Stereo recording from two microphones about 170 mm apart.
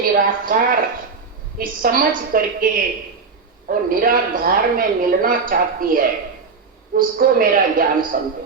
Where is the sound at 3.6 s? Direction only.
55° right (ahead or behind).